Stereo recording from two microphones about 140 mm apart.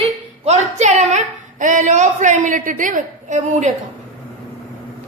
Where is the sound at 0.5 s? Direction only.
55° right (ahead or behind).